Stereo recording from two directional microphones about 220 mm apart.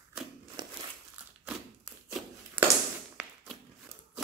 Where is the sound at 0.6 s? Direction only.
20° right (ahead or behind).